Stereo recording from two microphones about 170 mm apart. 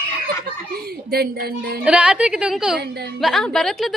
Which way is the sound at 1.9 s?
5° right (ahead or behind).